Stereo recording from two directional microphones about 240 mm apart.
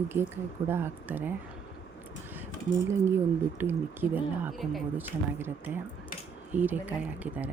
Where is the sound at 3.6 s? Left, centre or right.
Centre.